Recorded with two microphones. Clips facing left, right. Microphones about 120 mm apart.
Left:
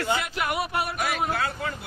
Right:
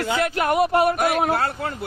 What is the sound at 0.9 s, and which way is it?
Speech, 55° right (ahead or behind).